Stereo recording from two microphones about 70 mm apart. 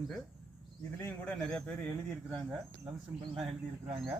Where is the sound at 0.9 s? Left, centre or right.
Left.